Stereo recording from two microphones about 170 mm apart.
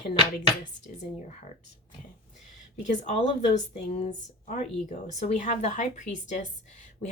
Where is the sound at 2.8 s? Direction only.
45° left (ahead or behind).